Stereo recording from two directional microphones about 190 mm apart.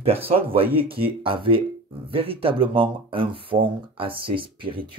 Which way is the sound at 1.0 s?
30° right (ahead or behind).